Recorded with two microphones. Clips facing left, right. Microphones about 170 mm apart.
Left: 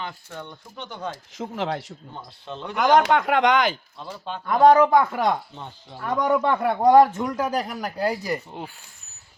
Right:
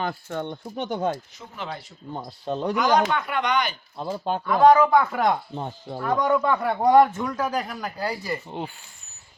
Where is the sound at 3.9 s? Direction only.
40° right (ahead or behind).